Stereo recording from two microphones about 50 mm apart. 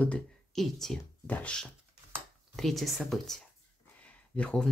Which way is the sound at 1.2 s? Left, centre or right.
Left.